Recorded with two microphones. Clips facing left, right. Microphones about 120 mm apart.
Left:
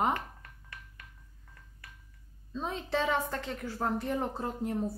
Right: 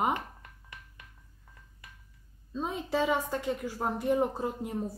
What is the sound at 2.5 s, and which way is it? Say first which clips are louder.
Speech: right 2 dB; 10° right (ahead or behind).